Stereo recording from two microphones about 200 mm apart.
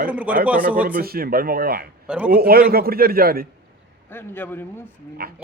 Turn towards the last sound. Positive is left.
turn(degrees=-50)  # may be behind; listen again after turning